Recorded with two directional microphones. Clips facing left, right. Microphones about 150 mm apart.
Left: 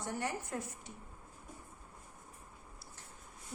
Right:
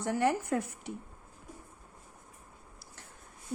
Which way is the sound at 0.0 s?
80° right.